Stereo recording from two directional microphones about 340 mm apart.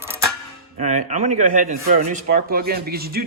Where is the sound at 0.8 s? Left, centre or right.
Right.